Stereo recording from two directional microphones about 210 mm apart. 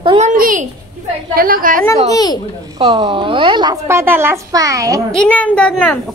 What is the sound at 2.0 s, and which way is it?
Speech, 20° left (ahead or behind).